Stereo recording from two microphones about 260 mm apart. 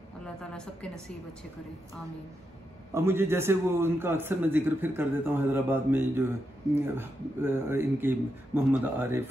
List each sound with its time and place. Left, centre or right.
0.4 s a woman's voice: centre
2.9 s a man's voice: centre